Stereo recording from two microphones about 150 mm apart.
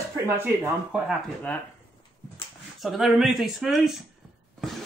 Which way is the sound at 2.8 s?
Centre (ahead or behind).